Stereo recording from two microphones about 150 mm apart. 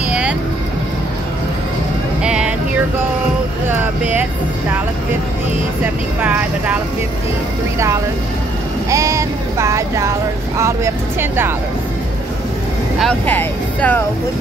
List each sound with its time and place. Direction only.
0.1 s vehicle: 5° right (ahead or behind)
2.2 s music: 5° right (ahead or behind)
3.6 s a sound: 15° right (ahead or behind)
6.2 s speech: 10° right (ahead or behind)
8.9 s a sound: 20° right (ahead or behind)
10.6 s speech: 15° right (ahead or behind)
13.0 s speech: 10° left (ahead or behind)